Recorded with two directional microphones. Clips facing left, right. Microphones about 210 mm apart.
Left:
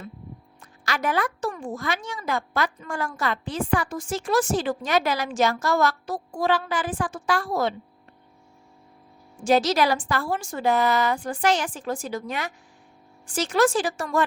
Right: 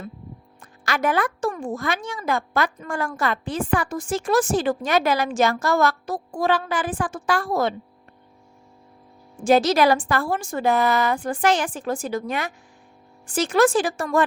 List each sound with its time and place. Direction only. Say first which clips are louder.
0.6 s speech: right 4 dB; 50° right (ahead or behind)
9.4 s speech: right 3 dB; 50° right (ahead or behind)